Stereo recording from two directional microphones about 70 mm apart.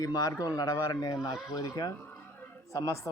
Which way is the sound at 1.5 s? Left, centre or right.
Left.